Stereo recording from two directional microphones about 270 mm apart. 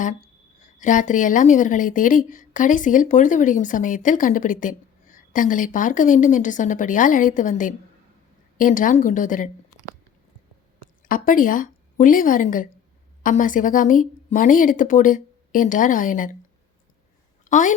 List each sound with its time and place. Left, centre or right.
0.8 s speech: left
11.0 s a woman's voice: left
17.4 s a sound: left